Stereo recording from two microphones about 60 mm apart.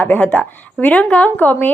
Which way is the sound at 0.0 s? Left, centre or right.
Left.